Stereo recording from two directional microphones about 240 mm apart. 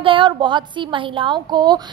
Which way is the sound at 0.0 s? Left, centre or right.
Right.